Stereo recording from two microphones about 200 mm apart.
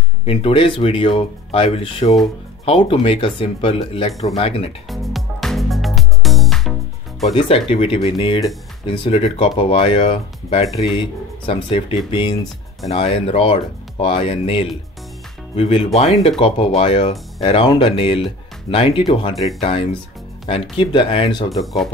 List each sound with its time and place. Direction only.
0.2 s speech: 30° left (ahead or behind)
4.8 s music: centre (ahead or behind)
7.3 s speech: 30° left (ahead or behind)
21.5 s speech: centre (ahead or behind)